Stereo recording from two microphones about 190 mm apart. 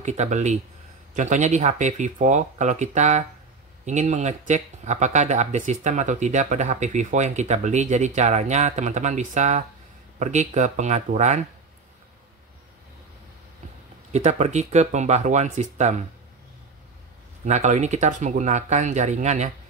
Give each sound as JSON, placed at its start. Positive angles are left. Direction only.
{"t": 0.0, "sound": "speech", "side_deg": -35}
{"t": 14.1, "sound": "speech", "side_deg": -35}
{"t": 17.5, "sound": "speech", "side_deg": -35}